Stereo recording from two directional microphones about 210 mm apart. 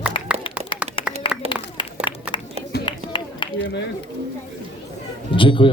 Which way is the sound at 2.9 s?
25° left (ahead or behind).